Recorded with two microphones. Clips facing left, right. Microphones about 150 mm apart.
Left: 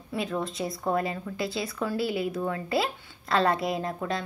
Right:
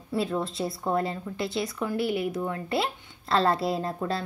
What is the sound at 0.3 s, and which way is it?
A woman's voice, 25° right (ahead or behind).